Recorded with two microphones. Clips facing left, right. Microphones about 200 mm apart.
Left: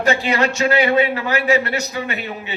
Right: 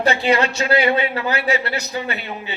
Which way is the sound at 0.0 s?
35° right (ahead or behind).